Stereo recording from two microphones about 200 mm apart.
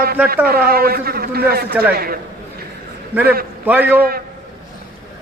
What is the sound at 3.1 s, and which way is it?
Speech, 10° right (ahead or behind).